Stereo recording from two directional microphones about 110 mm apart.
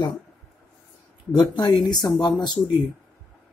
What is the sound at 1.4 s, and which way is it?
A man's voice, 40° left (ahead or behind).